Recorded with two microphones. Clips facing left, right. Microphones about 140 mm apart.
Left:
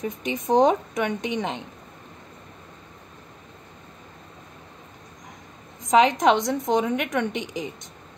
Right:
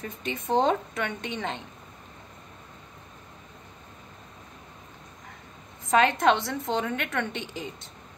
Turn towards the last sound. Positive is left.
turn(degrees=15)  # may be behind; listen again after turning